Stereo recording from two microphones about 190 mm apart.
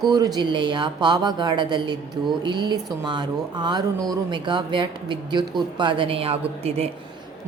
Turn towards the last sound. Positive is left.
turn(degrees=-30)  # may be behind; listen again after turning